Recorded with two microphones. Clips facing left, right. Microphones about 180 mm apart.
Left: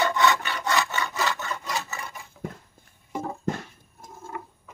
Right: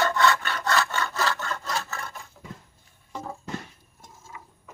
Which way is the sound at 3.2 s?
55° left (ahead or behind).